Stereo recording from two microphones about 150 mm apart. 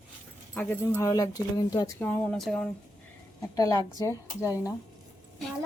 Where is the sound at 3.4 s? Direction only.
20° left (ahead or behind).